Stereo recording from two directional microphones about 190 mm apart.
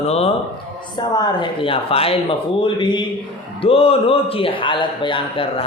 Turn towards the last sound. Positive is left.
turn(degrees=30)  # may be behind; listen again after turning